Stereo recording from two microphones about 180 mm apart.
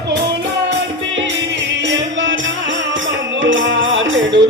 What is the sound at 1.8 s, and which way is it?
Music, 90° right.